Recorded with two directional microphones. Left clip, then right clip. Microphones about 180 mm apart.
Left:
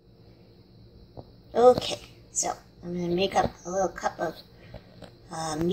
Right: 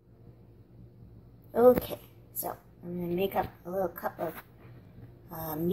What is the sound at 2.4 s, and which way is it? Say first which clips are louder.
A woman's voice: left 6 dB; 20° left (ahead or behind).